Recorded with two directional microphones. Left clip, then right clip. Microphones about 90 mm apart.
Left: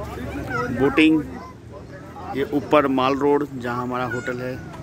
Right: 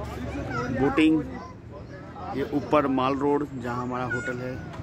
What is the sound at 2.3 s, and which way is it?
Speech, 15° left (ahead or behind).